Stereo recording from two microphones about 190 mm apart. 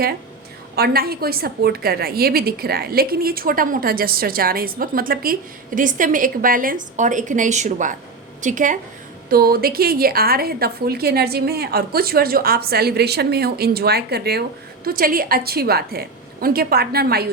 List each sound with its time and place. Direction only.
0.8 s a woman's voice: 55° right (ahead or behind)